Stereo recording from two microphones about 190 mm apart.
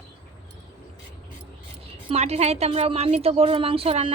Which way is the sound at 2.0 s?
35° right (ahead or behind).